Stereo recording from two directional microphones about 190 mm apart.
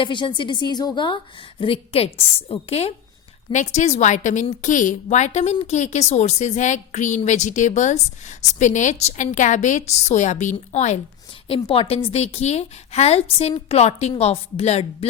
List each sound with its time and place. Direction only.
0.0 s a woman's voice: 25° left (ahead or behind)